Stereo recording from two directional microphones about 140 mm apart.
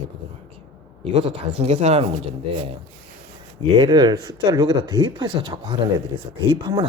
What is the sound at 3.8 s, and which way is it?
Speech, 30° right (ahead or behind).